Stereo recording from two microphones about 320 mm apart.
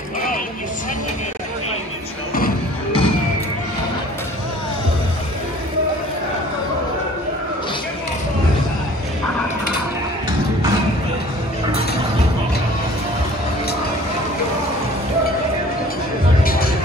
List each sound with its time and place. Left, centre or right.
2.3 s music: left
16.4 s music: left